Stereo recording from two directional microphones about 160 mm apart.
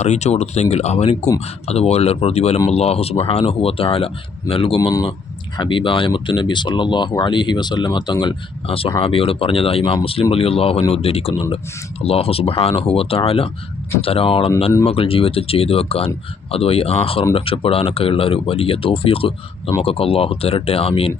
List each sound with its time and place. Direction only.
0.0 s speech: 45° left (ahead or behind)